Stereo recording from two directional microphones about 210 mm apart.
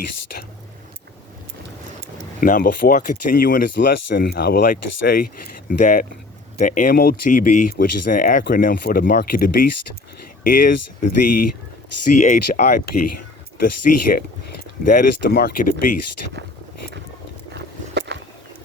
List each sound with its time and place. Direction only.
2.4 s speech: 40° left (ahead or behind)
13.9 s speech: 40° left (ahead or behind)
17.5 s a sound: 55° right (ahead or behind)